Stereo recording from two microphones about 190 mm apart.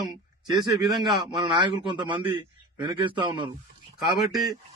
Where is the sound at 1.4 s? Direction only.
25° right (ahead or behind).